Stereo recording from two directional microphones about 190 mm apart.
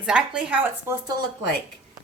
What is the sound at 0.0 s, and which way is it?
A woman's voice, 5° right (ahead or behind).